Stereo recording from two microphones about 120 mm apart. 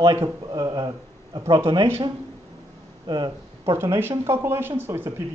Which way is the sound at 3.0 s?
35° right (ahead or behind).